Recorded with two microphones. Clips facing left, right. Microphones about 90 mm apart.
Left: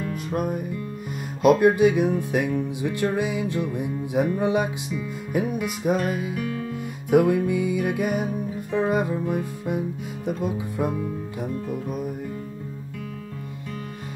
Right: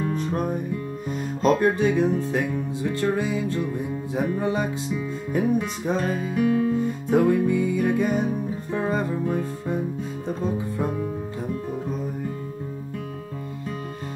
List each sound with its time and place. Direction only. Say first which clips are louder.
0.2 s music: right 1 dB; 10° left (ahead or behind)
6.3 s music: right 8 dB; 25° right (ahead or behind)
6.8 s music: left 1 dB; 15° left (ahead or behind)